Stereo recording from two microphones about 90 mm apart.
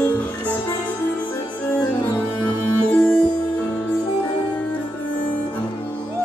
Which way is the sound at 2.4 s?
15° left (ahead or behind).